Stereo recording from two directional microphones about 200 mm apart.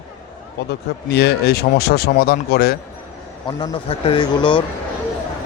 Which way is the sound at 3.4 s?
25° left (ahead or behind).